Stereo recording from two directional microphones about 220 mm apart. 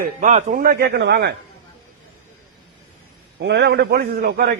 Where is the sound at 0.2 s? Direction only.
30° right (ahead or behind); by 1.3 s 50° right (ahead or behind).